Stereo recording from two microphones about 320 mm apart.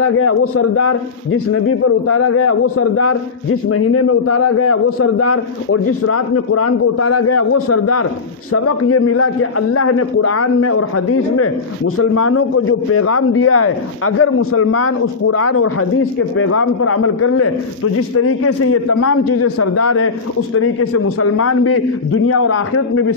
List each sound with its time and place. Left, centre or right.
0.0 s a man's voice: left